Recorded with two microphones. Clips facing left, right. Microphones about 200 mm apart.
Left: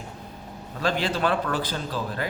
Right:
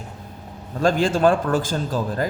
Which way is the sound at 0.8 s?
45° right (ahead or behind).